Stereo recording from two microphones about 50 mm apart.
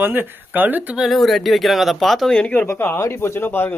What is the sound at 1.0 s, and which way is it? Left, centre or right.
Speech, centre.